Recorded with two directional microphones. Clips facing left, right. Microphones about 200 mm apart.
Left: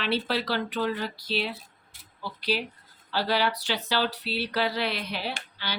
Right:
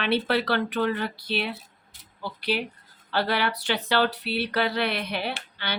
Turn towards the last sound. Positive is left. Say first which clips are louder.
# right 2 dB
turn(degrees=-60)  # may be behind; listen again after turning